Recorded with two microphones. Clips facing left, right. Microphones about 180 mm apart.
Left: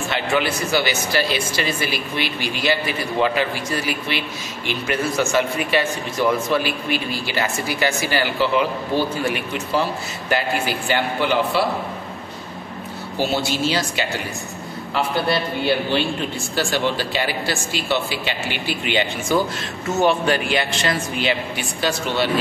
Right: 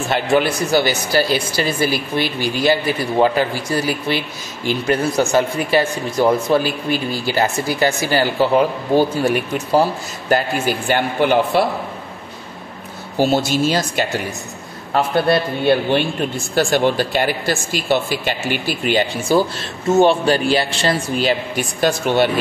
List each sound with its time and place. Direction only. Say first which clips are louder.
0.1 s speech: right 6 dB; 40° right (ahead or behind)
13.2 s speech: right 5 dB; 45° right (ahead or behind)